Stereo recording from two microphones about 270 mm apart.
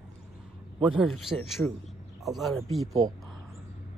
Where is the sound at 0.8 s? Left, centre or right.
Centre.